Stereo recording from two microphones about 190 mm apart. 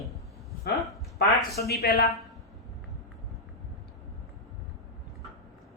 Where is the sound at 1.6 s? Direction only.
55° left (ahead or behind).